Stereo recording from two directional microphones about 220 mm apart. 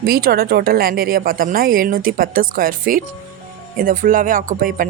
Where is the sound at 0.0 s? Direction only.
45° right (ahead or behind).